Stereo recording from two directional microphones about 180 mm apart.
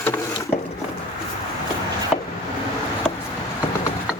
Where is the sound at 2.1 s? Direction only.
Centre (ahead or behind).